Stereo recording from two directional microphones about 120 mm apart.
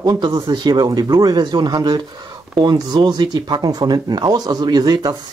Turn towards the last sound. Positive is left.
turn(degrees=-35)  # may be behind; listen again after turning